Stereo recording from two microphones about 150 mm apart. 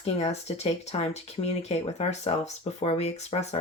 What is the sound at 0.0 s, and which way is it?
A woman's voice, 45° left (ahead or behind).